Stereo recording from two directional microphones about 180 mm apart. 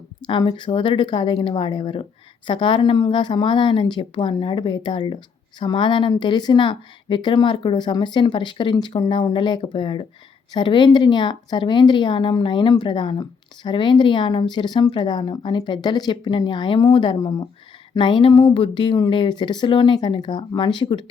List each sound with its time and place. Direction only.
0.3 s speech: 25° left (ahead or behind)